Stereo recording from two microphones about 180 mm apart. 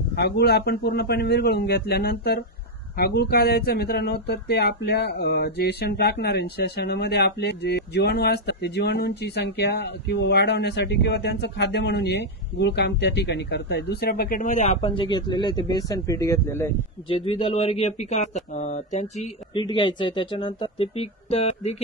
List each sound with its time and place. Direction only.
0.1 s a man's voice: 65° left (ahead or behind); by 16.7 s 15° left (ahead or behind)
17.1 s speech: 30° left (ahead or behind)
19.6 s speech: 25° left (ahead or behind)